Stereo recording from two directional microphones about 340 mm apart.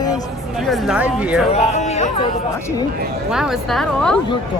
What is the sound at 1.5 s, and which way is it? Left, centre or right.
Speech, centre.